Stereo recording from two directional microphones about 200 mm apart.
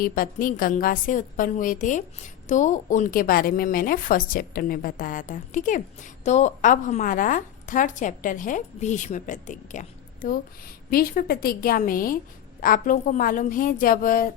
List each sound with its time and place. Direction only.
0.0 s a woman's voice: 45° left (ahead or behind)